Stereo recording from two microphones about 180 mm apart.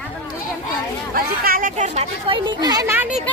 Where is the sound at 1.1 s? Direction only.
55° right (ahead or behind); by 3.0 s 15° right (ahead or behind).